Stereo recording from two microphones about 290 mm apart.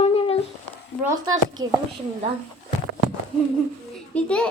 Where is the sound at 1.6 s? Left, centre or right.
Centre.